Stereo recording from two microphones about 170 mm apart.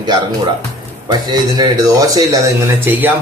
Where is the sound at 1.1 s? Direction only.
25° right (ahead or behind).